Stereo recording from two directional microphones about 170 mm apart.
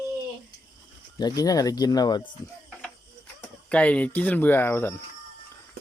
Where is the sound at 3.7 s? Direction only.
5° left (ahead or behind).